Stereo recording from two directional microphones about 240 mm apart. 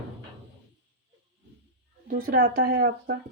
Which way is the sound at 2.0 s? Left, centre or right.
Right.